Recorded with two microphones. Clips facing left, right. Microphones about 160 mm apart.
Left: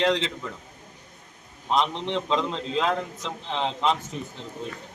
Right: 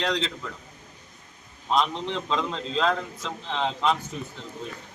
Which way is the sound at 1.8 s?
25° left (ahead or behind).